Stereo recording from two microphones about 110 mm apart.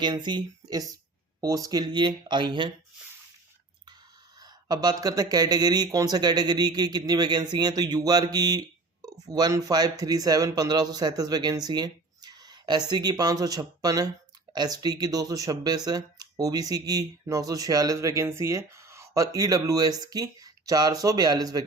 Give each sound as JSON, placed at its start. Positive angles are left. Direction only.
{"t": 0.0, "sound": "speech", "side_deg": -45}
{"t": 4.4, "sound": "speech", "side_deg": -35}